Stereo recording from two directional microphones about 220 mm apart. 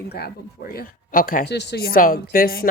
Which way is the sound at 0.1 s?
45° left (ahead or behind).